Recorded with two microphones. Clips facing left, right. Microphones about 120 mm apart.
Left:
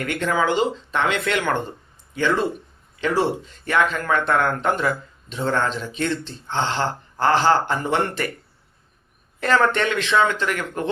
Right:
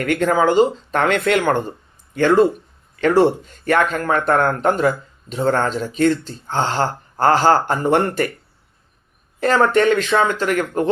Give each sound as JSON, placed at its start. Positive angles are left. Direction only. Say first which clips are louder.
{"t": 0.0, "sound": "speech", "louder": "right 5 dB", "side_deg": -45}
{"t": 9.4, "sound": "a man's voice", "louder": "right 4 dB", "side_deg": -35}